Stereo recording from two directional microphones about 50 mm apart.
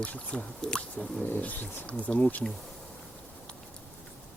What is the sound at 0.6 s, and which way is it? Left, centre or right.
Drip, centre.